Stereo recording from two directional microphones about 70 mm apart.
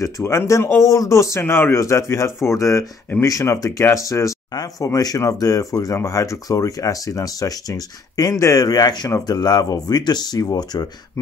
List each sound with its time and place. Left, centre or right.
0.0 s speech: left
1.4 s speech: left
1.8 s speech: left
8.5 s speech: left